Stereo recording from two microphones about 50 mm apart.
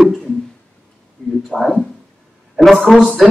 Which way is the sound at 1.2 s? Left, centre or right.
Centre.